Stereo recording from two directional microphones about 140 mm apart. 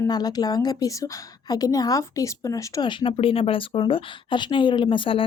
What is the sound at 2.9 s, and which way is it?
Speech, 35° left (ahead or behind).